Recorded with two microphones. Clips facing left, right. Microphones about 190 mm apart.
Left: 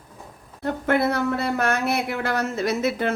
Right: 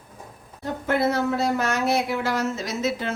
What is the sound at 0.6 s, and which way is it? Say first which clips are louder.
Speech: left 2 dB; 60° left (ahead or behind).